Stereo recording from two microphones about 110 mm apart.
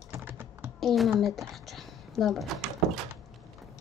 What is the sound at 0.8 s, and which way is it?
Speech, centre (ahead or behind).